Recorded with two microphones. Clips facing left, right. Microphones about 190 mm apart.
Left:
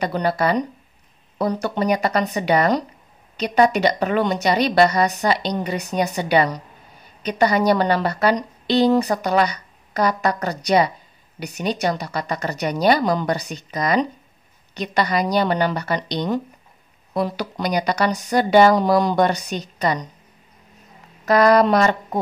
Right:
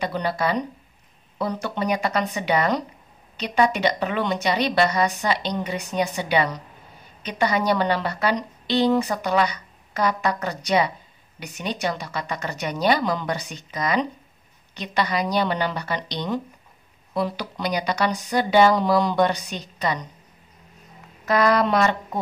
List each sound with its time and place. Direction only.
0.0 s a woman's voice: 45° left (ahead or behind)
21.3 s a woman's voice: 40° left (ahead or behind)